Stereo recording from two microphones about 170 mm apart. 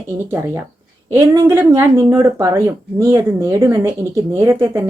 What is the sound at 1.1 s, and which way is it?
A woman's voice, 15° right (ahead or behind).